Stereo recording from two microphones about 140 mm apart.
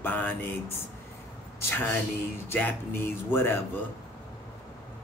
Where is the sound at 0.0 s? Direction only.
15° left (ahead or behind).